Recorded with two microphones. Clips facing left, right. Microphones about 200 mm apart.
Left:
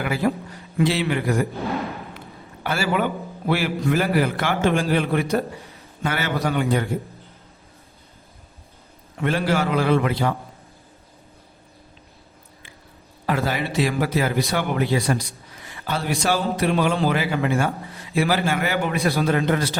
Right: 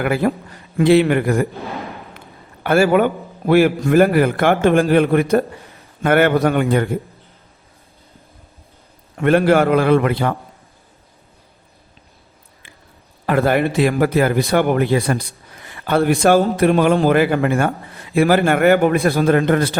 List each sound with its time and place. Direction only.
0.0 s a man's voice: 55° right (ahead or behind)
1.5 s a sound: centre (ahead or behind)
2.6 s a man's voice: 50° right (ahead or behind)
9.2 s speech: 55° right (ahead or behind)
13.2 s a man's voice: 55° right (ahead or behind)